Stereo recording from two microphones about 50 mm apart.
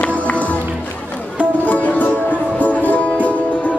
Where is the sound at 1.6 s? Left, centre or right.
Left.